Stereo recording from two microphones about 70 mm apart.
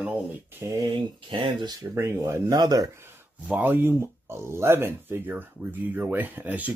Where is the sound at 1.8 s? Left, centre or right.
Right.